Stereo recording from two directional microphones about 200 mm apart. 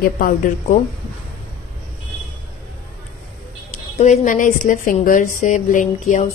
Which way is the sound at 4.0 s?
35° left (ahead or behind).